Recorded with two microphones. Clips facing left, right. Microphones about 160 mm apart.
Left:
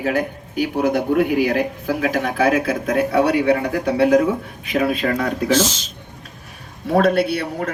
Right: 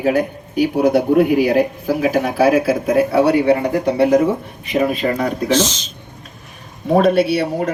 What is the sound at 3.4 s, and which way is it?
Speech, 20° right (ahead or behind).